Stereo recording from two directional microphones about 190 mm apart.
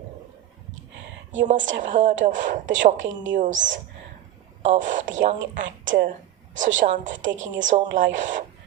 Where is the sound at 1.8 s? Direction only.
40° right (ahead or behind).